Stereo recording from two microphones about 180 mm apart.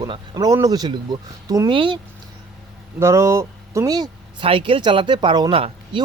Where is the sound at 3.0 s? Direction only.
15° right (ahead or behind).